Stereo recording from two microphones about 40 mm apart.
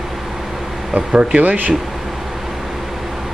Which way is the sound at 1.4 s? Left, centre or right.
Right.